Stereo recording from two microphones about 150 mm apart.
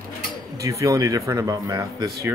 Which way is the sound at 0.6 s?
20° right (ahead or behind).